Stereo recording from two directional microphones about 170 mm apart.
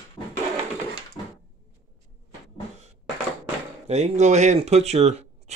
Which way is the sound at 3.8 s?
40° right (ahead or behind).